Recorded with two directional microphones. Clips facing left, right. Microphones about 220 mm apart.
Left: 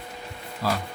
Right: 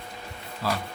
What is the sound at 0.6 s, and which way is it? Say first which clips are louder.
Speech: left 2 dB; 40° left (ahead or behind).